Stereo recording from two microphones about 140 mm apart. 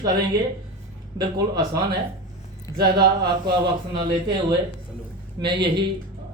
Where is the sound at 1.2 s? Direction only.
30° right (ahead or behind).